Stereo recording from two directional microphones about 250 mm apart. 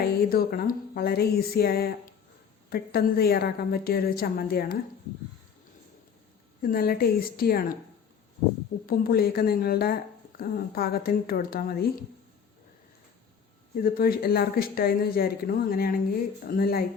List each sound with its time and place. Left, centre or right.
0.0 s a woman's voice: left
6.6 s a woman's voice: left
8.9 s a woman's voice: left
13.7 s a woman's voice: left